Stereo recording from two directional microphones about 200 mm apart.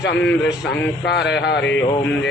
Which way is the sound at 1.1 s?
60° left (ahead or behind).